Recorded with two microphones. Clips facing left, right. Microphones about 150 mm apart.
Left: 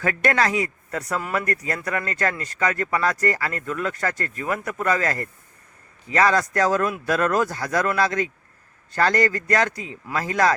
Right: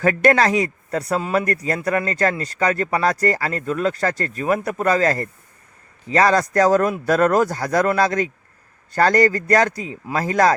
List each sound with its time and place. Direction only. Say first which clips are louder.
0.0 s speech: right 6 dB; 35° right (ahead or behind)